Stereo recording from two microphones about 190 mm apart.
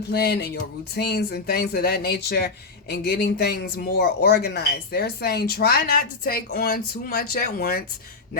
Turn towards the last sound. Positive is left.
turn(degrees=50)  # may be behind; listen again after turning